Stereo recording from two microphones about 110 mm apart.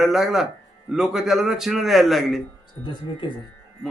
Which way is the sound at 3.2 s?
45° left (ahead or behind).